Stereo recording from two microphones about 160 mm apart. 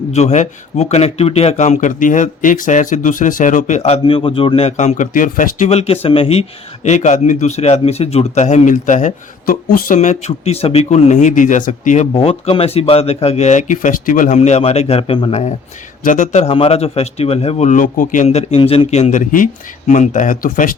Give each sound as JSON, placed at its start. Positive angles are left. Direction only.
{"t": 0.1, "sound": "speech", "side_deg": 45}
{"t": 6.8, "sound": "speech", "side_deg": 45}
{"t": 12.1, "sound": "speech", "side_deg": 40}
{"t": 16.0, "sound": "speech", "side_deg": 50}